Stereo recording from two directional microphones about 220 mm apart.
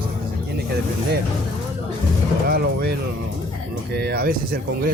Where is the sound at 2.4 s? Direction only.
45° right (ahead or behind).